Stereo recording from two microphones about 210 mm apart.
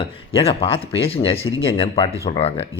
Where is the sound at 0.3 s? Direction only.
25° left (ahead or behind).